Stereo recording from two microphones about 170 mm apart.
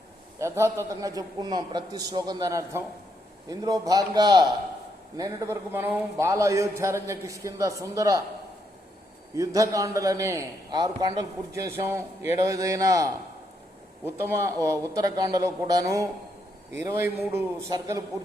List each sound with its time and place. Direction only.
0.3 s a man's voice: 15° right (ahead or behind)
9.3 s a man's voice: 20° right (ahead or behind)